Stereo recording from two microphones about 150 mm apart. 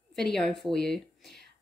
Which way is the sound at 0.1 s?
5° left (ahead or behind).